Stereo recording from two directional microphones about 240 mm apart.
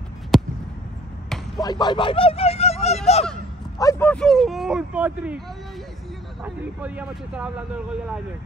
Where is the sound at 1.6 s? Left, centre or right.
Centre.